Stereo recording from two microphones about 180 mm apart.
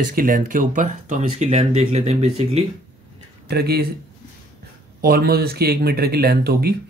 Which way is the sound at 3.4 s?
60° right (ahead or behind).